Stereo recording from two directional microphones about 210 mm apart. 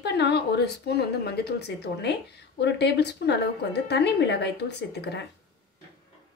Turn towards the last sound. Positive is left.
turn(degrees=55)  # may be behind; listen again after turning